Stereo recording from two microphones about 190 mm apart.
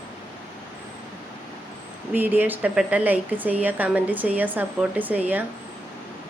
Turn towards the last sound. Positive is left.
turn(degrees=-10)  # may be behind; listen again after turning